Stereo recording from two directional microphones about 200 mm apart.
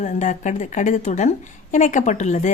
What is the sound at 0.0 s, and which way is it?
A woman's voice, 40° left (ahead or behind).